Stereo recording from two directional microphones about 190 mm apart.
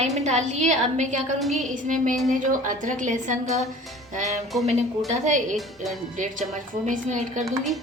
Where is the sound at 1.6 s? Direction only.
40° right (ahead or behind).